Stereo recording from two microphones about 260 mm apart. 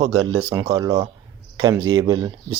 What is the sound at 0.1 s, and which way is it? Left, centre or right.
Speech, right.